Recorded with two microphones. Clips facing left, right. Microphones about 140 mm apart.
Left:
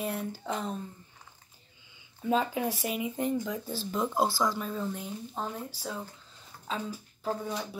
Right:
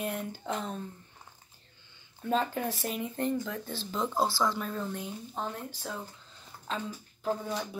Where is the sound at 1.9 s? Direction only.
5° left (ahead or behind).